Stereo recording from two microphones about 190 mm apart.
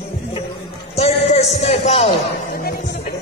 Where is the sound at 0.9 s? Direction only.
35° left (ahead or behind).